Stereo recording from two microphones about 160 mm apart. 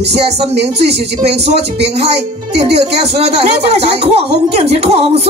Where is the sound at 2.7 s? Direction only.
40° right (ahead or behind).